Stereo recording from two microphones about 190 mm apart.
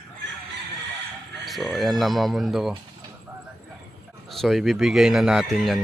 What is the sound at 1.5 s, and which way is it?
Speech, centre (ahead or behind).